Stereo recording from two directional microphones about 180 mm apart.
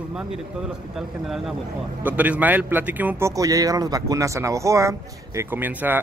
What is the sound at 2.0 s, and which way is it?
Speech, 10° right (ahead or behind).